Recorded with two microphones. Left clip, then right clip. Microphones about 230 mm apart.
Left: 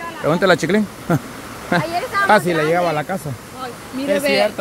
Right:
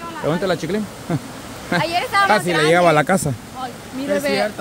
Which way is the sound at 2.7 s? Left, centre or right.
Right.